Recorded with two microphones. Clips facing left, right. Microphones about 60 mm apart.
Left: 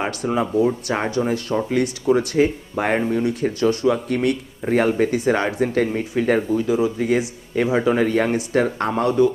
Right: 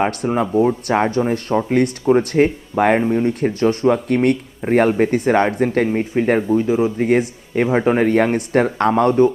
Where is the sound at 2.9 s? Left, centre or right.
Right.